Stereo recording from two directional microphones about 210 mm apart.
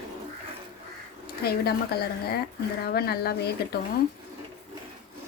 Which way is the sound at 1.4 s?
50° left (ahead or behind).